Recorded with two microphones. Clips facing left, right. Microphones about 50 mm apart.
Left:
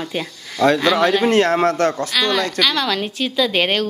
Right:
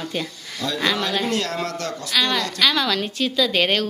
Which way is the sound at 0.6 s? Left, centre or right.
Left.